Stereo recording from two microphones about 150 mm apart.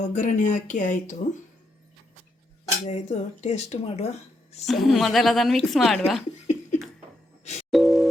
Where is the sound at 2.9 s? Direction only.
50° left (ahead or behind).